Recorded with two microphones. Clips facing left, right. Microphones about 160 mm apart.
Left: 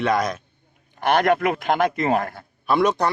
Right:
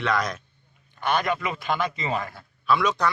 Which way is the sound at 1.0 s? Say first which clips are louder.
Left 7 dB; 70° left (ahead or behind).